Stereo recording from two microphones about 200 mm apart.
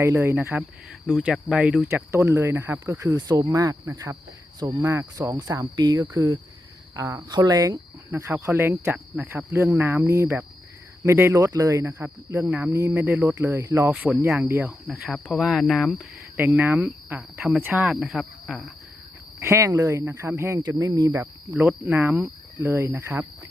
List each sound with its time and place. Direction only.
0.0 s speech: 15° right (ahead or behind)
1.0 s speech: centre (ahead or behind)
19.4 s speech: 15° right (ahead or behind)